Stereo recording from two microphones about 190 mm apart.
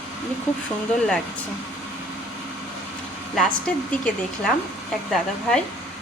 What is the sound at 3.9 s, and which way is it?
Speech, 5° left (ahead or behind).